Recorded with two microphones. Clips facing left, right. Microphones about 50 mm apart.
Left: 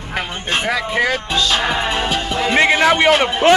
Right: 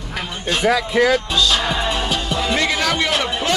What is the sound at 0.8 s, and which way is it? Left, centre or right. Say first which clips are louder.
Speech: right 2 dB; centre.